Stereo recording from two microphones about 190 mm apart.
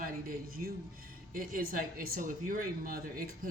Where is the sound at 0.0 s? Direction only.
50° right (ahead or behind).